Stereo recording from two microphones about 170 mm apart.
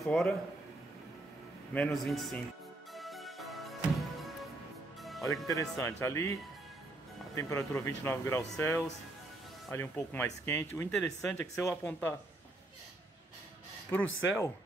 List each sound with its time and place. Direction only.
0.0 s a man's voice: centre (ahead or behind)
1.7 s a man's voice: 5° left (ahead or behind)
2.9 s music: centre (ahead or behind)
5.5 s speech: 20° left (ahead or behind)
7.3 s speech: 20° left (ahead or behind)
11.0 s a man's voice: 5° left (ahead or behind)